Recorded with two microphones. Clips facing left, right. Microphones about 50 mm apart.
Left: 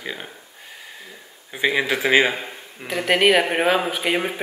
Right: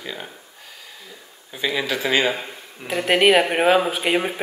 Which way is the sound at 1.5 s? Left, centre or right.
Left.